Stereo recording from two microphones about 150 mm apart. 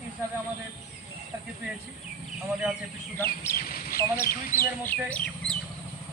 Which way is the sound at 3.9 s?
15° left (ahead or behind).